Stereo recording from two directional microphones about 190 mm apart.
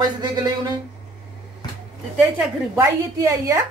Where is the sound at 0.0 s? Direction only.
20° right (ahead or behind).